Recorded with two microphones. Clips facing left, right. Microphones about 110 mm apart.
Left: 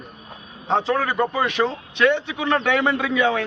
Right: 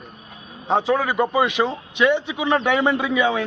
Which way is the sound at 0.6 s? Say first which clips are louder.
Right 1 dB; 10° right (ahead or behind).